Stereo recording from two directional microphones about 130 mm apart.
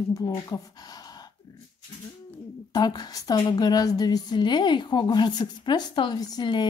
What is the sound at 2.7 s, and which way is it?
A woman's voice, 30° left (ahead or behind).